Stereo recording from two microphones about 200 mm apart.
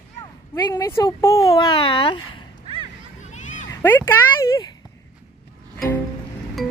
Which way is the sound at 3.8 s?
15° left (ahead or behind).